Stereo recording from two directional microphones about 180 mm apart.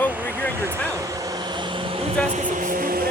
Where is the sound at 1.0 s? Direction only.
20° right (ahead or behind).